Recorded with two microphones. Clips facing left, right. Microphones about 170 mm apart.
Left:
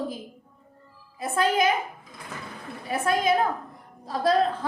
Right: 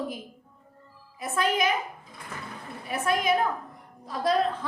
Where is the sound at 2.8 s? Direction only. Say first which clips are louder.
Left 2 dB; 30° left (ahead or behind).